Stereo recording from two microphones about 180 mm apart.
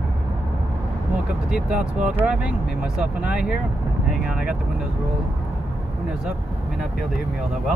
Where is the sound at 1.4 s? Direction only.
5° right (ahead or behind).